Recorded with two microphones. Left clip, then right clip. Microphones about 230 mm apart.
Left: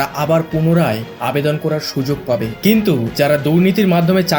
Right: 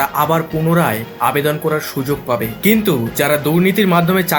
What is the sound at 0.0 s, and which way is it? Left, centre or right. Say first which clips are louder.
Speech: right 1 dB; left.